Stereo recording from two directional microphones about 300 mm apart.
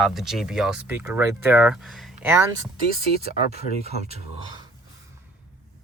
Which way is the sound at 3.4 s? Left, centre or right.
Left.